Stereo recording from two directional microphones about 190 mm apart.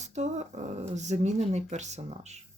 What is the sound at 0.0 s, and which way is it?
Speech, 35° right (ahead or behind).